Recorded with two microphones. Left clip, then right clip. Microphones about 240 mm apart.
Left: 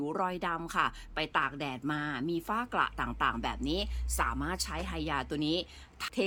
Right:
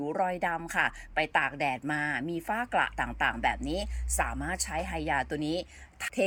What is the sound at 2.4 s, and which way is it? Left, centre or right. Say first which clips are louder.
Speech: right 3 dB; left.